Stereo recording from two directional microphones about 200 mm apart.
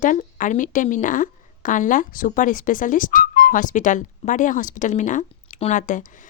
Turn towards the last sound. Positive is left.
turn(degrees=40)  # may be behind; listen again after turning